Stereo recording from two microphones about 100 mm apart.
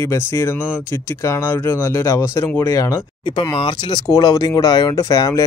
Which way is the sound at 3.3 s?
60° left (ahead or behind).